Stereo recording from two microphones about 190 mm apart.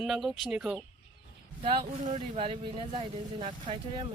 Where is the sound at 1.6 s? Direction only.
35° right (ahead or behind).